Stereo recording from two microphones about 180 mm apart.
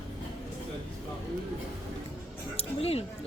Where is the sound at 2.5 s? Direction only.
35° left (ahead or behind).